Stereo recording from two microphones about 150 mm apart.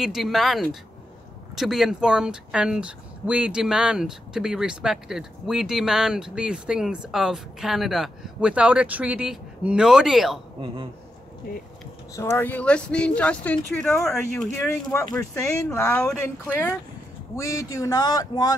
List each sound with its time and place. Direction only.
0.0 s speech: centre (ahead or behind)
12.2 s speech: 15° left (ahead or behind)